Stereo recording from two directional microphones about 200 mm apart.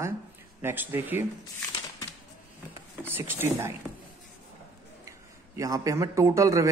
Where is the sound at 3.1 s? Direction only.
10° right (ahead or behind).